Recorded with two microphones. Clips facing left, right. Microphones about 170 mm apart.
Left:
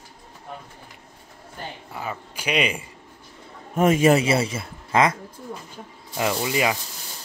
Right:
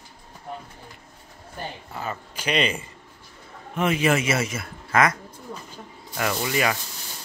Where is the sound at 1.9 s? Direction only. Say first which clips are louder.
Left 3 dB; 10° left (ahead or behind).